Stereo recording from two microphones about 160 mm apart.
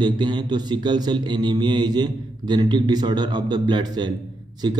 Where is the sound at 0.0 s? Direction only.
30° right (ahead or behind).